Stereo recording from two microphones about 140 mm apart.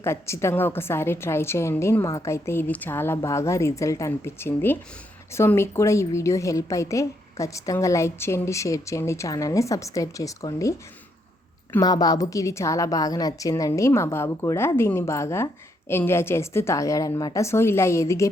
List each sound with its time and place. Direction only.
0.0 s a woman's voice: 20° left (ahead or behind)
11.8 s a woman's voice: 25° left (ahead or behind)